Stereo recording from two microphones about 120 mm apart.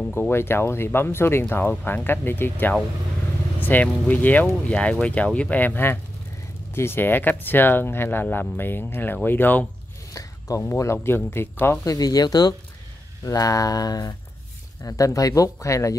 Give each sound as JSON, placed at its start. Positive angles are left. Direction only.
{"t": 0.3, "sound": "speech", "side_deg": 20}
{"t": 10.1, "sound": "speech", "side_deg": 25}
{"t": 11.8, "sound": "speech", "side_deg": 30}